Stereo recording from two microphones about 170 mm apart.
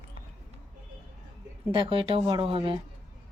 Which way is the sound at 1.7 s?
30° right (ahead or behind).